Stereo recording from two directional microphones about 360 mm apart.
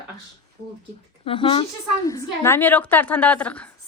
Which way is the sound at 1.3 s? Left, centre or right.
Centre.